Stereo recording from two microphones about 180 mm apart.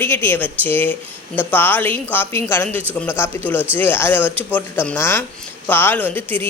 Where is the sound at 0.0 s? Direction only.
15° left (ahead or behind).